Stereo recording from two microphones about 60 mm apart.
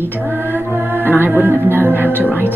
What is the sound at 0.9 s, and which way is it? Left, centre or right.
Music, right.